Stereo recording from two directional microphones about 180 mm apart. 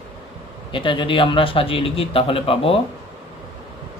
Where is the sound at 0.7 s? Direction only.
25° left (ahead or behind).